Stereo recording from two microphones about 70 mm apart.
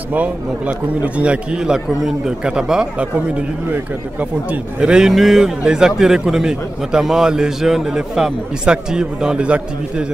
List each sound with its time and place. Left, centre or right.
0.1 s a man's voice: centre